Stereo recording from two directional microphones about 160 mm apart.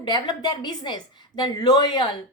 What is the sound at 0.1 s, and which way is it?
Speech, 30° left (ahead or behind).